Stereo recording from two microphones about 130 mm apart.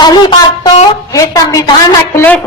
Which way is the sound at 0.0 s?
35° left (ahead or behind).